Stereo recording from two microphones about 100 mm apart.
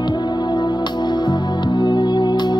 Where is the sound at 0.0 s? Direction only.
45° left (ahead or behind).